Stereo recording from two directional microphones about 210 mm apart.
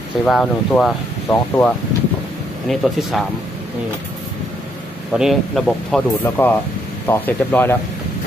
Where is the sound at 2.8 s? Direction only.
Centre (ahead or behind).